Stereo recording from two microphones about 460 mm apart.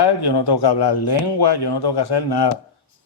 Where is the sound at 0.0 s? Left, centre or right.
Left.